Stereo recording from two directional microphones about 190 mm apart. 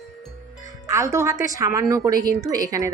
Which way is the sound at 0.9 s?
15° right (ahead or behind).